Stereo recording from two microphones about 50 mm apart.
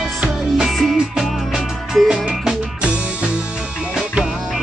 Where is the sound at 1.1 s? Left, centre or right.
Centre.